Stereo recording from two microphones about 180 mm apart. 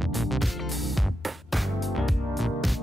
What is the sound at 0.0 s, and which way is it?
Music, centre (ahead or behind).